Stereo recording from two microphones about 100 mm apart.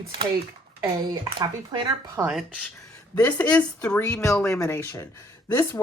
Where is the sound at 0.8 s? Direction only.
40° right (ahead or behind).